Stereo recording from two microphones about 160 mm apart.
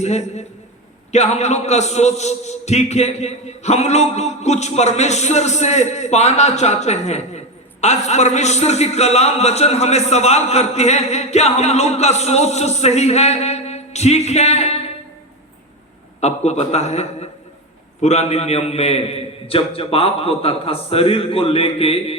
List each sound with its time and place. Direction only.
0.0 s a man's voice: 45° left (ahead or behind)
16.2 s a man's voice: 45° left (ahead or behind)